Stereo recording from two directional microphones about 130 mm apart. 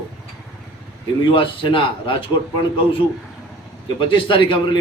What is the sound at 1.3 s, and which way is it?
A man's voice, 40° left (ahead or behind).